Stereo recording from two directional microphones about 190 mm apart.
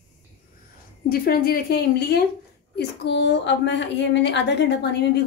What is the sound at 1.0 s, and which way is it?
A woman's voice, 50° left (ahead or behind).